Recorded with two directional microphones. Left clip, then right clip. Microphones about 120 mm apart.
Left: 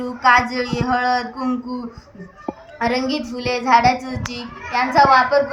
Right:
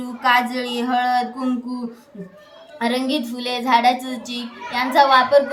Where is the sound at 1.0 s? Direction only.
60° right (ahead or behind).